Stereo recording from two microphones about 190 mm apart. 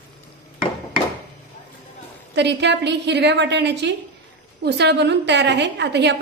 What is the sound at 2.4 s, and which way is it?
A woman's voice, 65° right (ahead or behind).